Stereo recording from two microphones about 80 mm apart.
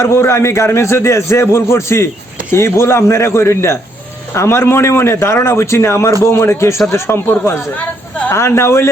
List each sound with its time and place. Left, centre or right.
0.0 s a man's voice: left